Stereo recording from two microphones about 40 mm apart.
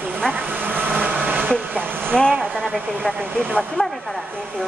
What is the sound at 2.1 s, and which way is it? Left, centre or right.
Speech, centre.